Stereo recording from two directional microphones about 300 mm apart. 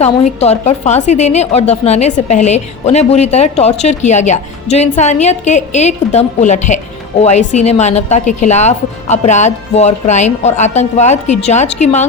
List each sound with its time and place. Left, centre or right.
0.0 s a woman's voice: left